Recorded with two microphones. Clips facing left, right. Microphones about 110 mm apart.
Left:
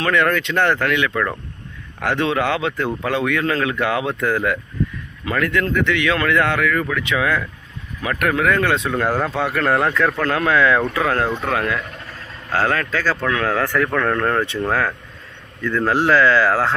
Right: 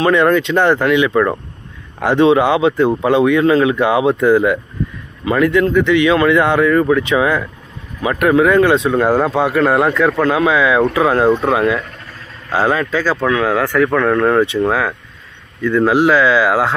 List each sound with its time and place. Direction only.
0.0 s speech: 20° right (ahead or behind)
8.0 s speech: 20° right (ahead or behind)